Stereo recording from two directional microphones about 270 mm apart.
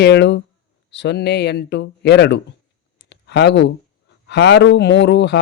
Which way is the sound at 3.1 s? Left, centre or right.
Left.